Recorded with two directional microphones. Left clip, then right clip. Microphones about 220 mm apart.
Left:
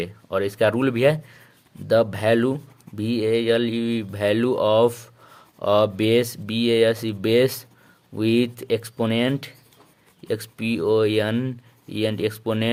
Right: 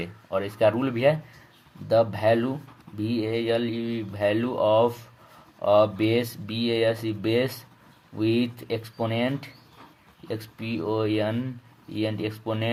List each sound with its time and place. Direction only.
0.0 s speech: 40° left (ahead or behind)